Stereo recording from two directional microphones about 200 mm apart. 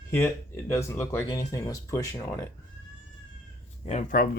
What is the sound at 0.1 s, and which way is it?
Speech, 15° left (ahead or behind).